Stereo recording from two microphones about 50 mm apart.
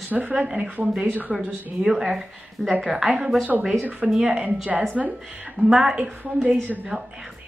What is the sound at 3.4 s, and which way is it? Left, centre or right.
Speech, right.